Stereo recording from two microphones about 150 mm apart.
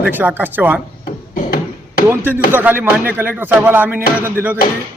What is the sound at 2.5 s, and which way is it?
Speech, 15° right (ahead or behind).